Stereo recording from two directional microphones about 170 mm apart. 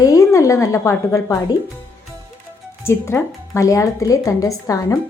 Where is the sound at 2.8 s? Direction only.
15° left (ahead or behind).